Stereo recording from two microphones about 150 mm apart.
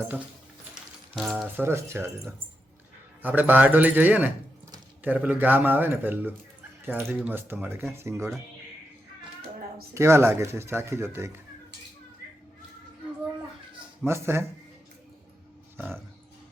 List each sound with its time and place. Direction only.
1.1 s frying: centre (ahead or behind)
1.5 s speech: 15° right (ahead or behind)
9.9 s speech: 20° right (ahead or behind)
14.1 s speech: 15° right (ahead or behind)